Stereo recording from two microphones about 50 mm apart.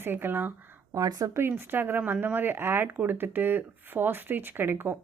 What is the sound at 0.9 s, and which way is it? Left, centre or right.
Speech, right.